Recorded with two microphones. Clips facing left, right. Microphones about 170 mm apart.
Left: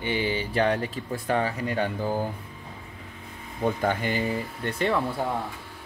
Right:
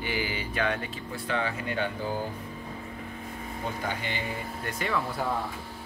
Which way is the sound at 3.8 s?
45° left (ahead or behind).